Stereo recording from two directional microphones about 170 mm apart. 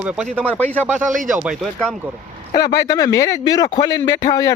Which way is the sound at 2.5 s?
25° left (ahead or behind).